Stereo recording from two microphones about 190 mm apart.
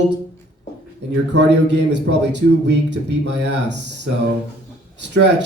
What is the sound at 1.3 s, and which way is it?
A man's voice, 65° right (ahead or behind).